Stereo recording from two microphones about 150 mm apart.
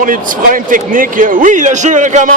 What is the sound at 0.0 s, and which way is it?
Speech, 65° right (ahead or behind).